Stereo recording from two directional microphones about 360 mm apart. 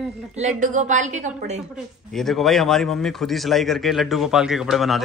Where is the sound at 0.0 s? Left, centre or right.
Centre.